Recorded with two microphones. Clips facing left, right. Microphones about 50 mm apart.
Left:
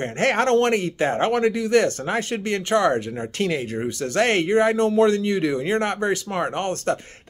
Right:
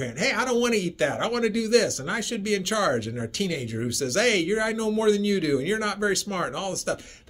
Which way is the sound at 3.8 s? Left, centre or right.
Left.